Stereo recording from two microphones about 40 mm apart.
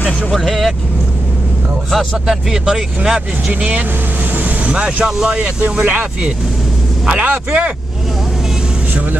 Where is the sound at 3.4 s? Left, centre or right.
Right.